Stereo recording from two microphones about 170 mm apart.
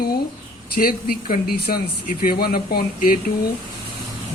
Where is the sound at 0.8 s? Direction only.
60° left (ahead or behind).